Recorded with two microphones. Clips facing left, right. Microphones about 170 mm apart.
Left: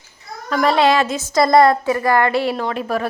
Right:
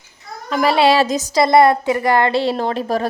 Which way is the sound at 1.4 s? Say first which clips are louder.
Even; 25° right (ahead or behind).